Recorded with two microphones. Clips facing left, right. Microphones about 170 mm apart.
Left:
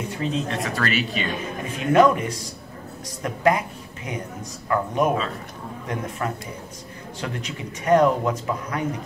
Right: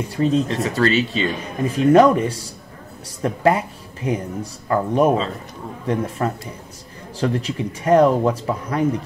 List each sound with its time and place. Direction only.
0.1 s speech: 35° right (ahead or behind)
0.7 s speech: 25° right (ahead or behind)